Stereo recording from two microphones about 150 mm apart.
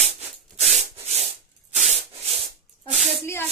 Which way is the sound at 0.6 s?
45° right (ahead or behind).